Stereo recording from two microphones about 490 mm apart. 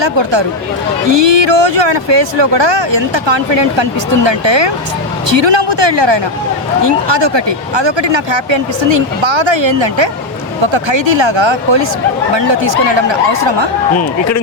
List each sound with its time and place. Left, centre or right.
0.0 s speech: right